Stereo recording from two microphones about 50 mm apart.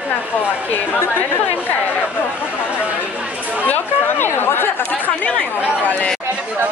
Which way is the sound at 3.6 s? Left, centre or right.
Left.